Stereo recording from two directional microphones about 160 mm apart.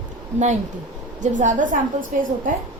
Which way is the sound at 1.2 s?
50° right (ahead or behind).